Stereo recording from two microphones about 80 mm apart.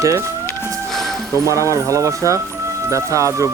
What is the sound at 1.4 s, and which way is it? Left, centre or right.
Speech, right.